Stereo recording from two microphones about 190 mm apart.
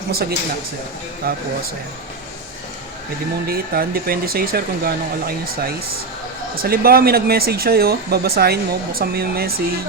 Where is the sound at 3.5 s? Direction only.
50° right (ahead or behind).